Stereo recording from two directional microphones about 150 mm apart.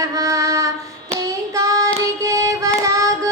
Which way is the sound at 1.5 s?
20° right (ahead or behind).